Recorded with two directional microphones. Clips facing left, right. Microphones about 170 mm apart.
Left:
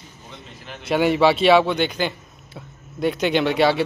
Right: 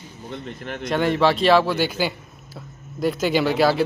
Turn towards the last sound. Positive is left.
turn(degrees=0)  # may be behind; listen again after turning